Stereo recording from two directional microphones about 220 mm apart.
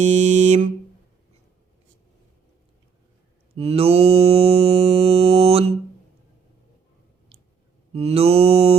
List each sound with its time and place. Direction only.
0.0 s a sound: 30° right (ahead or behind)
3.5 s mantra: 25° right (ahead or behind)
7.9 s mantra: 25° right (ahead or behind)